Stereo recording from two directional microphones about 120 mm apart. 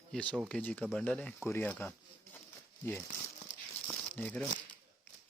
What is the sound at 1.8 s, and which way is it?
Speech, 20° left (ahead or behind).